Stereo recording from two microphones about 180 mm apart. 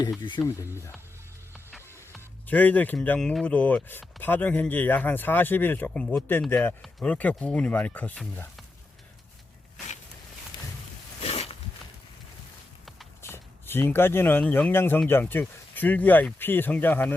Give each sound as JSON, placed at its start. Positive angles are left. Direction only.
{"t": 0.2, "sound": "speech", "side_deg": 25}
{"t": 2.5, "sound": "speech", "side_deg": 10}
{"t": 11.2, "sound": "a sound", "side_deg": 35}
{"t": 13.2, "sound": "speech", "side_deg": 10}